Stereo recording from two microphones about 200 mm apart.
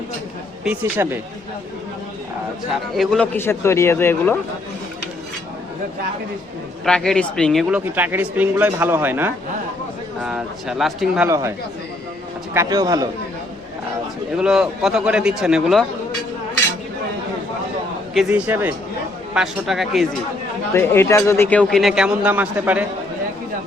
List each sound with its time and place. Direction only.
0.6 s speech: 10° right (ahead or behind)
2.9 s a man's voice: centre (ahead or behind)
6.8 s speech: 5° left (ahead or behind)
7.9 s speech: 10° right (ahead or behind)
11.3 s speech: 15° right (ahead or behind)
12.5 s speech: 20° right (ahead or behind)
14.3 s speech: 5° right (ahead or behind)
18.1 s speech: 5° right (ahead or behind)
20.7 s speech: 10° left (ahead or behind); by 22.9 s 10° right (ahead or behind)